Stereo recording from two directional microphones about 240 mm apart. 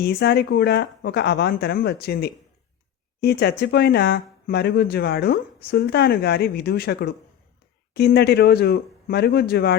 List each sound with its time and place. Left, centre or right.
0.0 s speech: left